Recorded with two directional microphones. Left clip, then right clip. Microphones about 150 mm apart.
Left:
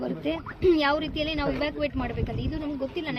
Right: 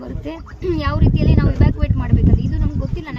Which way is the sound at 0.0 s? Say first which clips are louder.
Left 1 dB; 30° right (ahead or behind).